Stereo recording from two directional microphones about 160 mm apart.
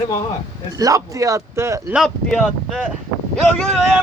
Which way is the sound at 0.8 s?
20° right (ahead or behind).